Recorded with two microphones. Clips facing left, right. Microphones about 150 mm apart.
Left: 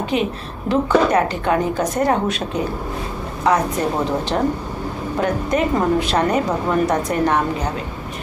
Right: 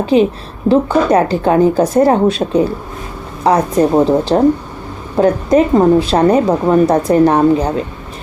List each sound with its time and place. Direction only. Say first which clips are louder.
0.0 s a woman's voice: right 9 dB; 35° right (ahead or behind)